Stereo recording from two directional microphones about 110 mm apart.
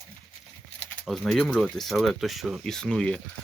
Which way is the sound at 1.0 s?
Centre (ahead or behind).